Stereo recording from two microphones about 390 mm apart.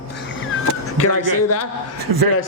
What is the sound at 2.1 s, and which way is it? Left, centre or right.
Speech, right.